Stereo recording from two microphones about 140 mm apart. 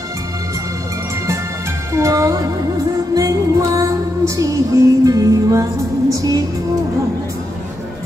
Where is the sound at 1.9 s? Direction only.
20° right (ahead or behind).